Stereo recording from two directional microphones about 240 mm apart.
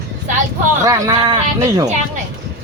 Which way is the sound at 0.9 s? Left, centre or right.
Centre.